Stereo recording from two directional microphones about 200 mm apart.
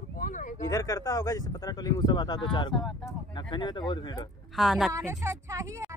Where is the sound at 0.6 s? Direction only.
15° left (ahead or behind).